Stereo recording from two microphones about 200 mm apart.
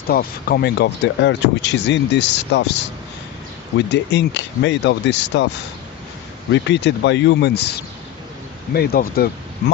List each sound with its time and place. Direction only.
0.1 s speech: 50° left (ahead or behind)
3.8 s speech: 60° left (ahead or behind)
6.5 s speech: 60° left (ahead or behind)
8.7 s speech: 50° left (ahead or behind)